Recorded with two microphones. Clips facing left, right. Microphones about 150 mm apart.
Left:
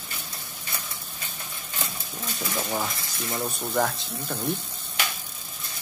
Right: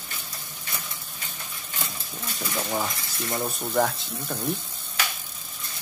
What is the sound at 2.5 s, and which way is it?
Speech, centre (ahead or behind).